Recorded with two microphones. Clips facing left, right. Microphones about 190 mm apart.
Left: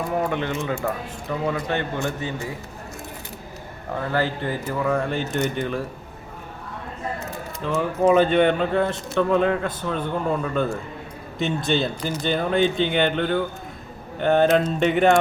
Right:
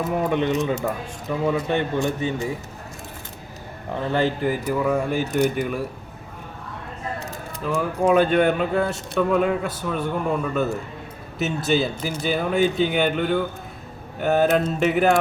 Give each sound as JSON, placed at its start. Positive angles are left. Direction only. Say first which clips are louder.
{"t": 0.3, "sound": "speech", "louder": "right 4 dB", "side_deg": -20}
{"t": 4.0, "sound": "speech", "louder": "right 3 dB", "side_deg": -20}
{"t": 7.6, "sound": "speech", "louder": "left 1 dB", "side_deg": -5}
{"t": 11.3, "sound": "mantra", "louder": "right 1 dB", "side_deg": -5}
{"t": 12.2, "sound": "speech", "louder": "even", "side_deg": -5}
{"t": 14.2, "sound": "mantra", "louder": "left 1 dB", "side_deg": -5}